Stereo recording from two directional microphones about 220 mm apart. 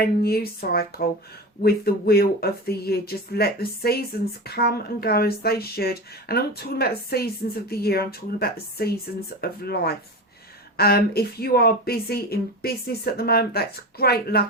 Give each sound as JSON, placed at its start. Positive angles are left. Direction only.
{"t": 0.0, "sound": "speech", "side_deg": 45}